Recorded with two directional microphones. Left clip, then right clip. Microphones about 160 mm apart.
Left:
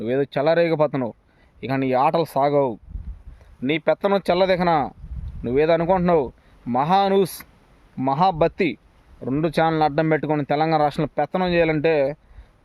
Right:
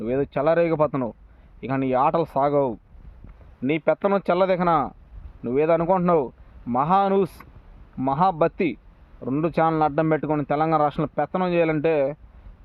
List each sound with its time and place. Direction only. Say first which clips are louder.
0.0 s speech: left 2 dB; 20° left (ahead or behind)